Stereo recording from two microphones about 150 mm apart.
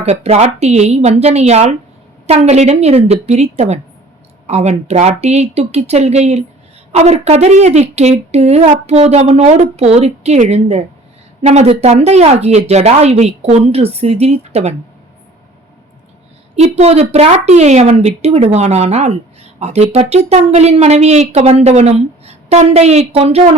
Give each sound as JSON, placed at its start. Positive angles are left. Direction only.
{"t": 0.0, "sound": "a woman's voice", "side_deg": -45}
{"t": 16.6, "sound": "a woman's voice", "side_deg": -45}